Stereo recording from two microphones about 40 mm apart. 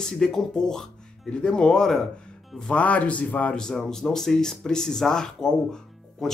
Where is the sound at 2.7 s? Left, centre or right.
Left.